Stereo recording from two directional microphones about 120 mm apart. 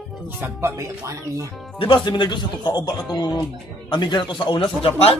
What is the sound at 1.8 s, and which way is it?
Speech, 45° left (ahead or behind).